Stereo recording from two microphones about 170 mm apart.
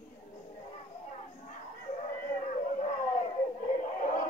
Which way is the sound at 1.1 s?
45° left (ahead or behind).